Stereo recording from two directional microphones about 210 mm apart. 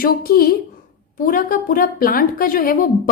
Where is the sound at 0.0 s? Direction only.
45° left (ahead or behind).